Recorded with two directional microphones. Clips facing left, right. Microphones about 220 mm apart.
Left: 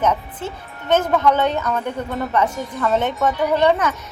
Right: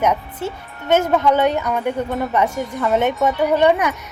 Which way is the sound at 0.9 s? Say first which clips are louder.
Right 1 dB; 15° right (ahead or behind).